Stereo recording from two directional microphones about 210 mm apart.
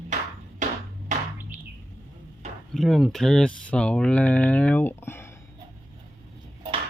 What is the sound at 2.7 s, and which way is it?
Speech, centre (ahead or behind).